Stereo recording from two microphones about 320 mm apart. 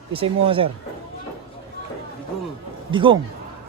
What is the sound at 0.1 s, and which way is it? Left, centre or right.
Speech, centre.